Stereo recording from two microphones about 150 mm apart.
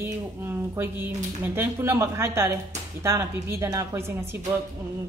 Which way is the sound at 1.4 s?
15° right (ahead or behind).